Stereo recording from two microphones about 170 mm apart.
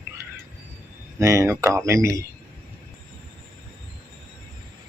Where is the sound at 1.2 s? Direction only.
15° right (ahead or behind).